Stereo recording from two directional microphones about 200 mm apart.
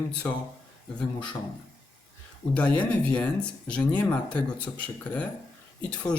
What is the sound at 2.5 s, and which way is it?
A man's voice, 5° left (ahead or behind).